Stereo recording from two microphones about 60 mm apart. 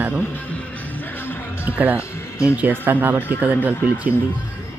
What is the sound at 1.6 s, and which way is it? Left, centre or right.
Speech, right.